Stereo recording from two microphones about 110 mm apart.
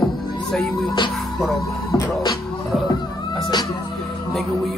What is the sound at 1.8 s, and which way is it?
Music, 35° left (ahead or behind).